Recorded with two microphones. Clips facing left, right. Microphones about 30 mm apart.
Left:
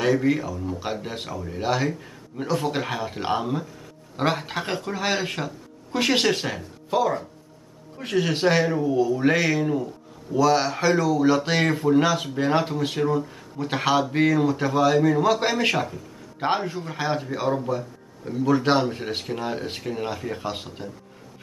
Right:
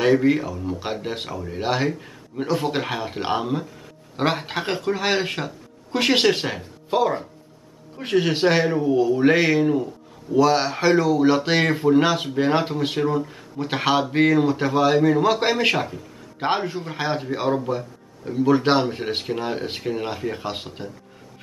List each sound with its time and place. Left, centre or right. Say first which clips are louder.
0.0 s speech: right 3 dB; right
2.0 s speech: right 3 dB; centre